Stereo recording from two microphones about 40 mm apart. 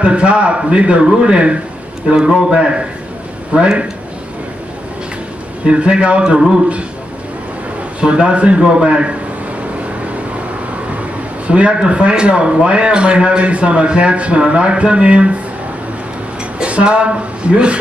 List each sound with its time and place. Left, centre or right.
0.0 s speech: right
5.7 s speech: right
8.0 s speech: right
11.0 s speech: right
16.5 s speech: right